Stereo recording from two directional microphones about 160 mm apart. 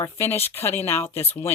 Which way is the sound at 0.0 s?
15° left (ahead or behind).